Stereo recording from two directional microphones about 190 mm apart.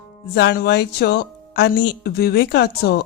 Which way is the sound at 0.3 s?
60° left (ahead or behind).